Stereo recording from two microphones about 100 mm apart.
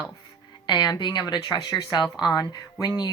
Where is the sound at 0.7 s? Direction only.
45° left (ahead or behind).